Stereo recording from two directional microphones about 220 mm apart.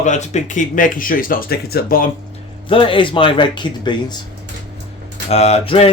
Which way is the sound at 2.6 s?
25° left (ahead or behind).